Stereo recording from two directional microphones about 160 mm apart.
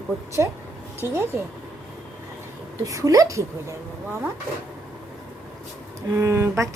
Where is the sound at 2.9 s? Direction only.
20° right (ahead or behind).